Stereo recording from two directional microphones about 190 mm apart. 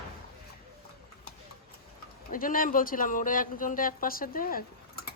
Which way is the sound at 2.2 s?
45° left (ahead or behind).